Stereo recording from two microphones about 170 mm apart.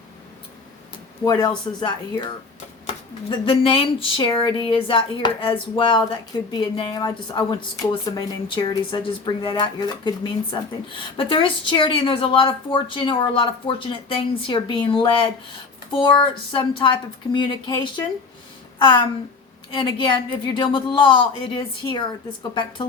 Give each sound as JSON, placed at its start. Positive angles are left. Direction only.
{"t": 1.2, "sound": "speech", "side_deg": 25}
{"t": 2.8, "sound": "speech", "side_deg": 30}